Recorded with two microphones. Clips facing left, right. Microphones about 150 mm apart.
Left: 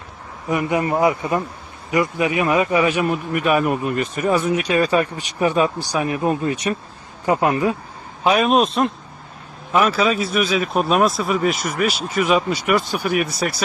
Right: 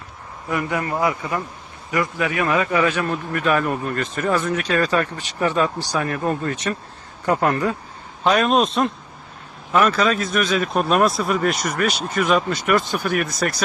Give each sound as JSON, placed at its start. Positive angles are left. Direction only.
{"t": 0.5, "sound": "a man's voice", "side_deg": 20}